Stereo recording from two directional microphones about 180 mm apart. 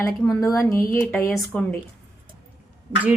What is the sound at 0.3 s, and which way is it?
Speech, 15° left (ahead or behind).